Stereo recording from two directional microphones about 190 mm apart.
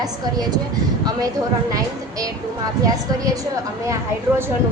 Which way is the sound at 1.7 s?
20° right (ahead or behind).